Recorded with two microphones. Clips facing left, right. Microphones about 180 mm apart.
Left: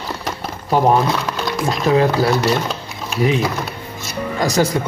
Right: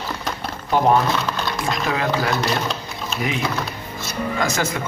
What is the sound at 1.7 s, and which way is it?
Speech, 35° left (ahead or behind).